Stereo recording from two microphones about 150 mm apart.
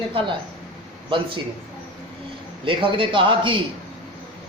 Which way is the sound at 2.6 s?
35° right (ahead or behind).